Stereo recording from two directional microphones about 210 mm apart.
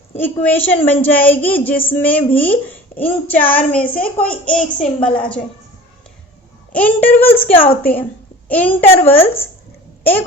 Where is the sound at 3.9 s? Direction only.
40° left (ahead or behind).